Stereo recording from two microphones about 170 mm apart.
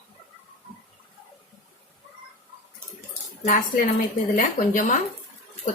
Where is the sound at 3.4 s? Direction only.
50° left (ahead or behind).